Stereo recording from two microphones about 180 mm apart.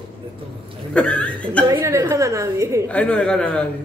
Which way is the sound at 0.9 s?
5° left (ahead or behind).